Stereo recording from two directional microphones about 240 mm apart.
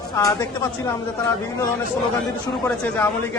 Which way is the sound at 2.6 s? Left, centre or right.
Centre.